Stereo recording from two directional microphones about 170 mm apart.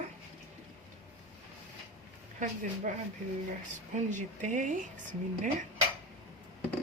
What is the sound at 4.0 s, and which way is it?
Speech, 45° right (ahead or behind).